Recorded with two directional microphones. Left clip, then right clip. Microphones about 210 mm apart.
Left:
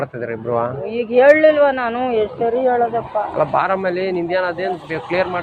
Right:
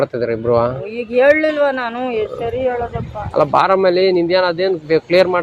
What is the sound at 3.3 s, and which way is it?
Speech, 90° right.